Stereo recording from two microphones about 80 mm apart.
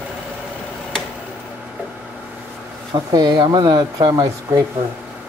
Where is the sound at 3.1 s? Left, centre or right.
Right.